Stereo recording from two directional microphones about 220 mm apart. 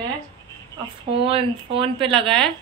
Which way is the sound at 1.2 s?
25° right (ahead or behind).